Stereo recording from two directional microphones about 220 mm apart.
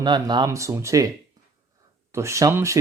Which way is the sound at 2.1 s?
15° right (ahead or behind).